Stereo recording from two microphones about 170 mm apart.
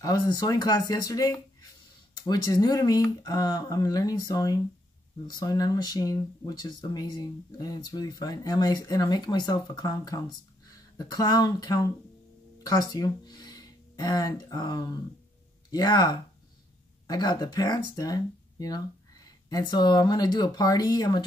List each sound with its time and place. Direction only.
0.0 s speech: 25° left (ahead or behind)
12.9 s speech: 25° left (ahead or behind)